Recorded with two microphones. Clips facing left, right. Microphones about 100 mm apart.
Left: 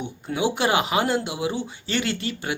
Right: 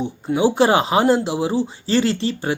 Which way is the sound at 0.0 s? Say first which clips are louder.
Right 7 dB; 35° right (ahead or behind).